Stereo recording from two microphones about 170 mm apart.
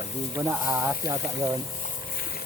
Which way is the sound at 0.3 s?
15° right (ahead or behind).